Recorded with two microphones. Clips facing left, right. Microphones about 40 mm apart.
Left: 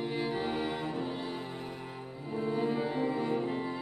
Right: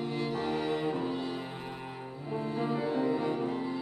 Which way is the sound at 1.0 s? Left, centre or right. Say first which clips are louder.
Right 2 dB; centre.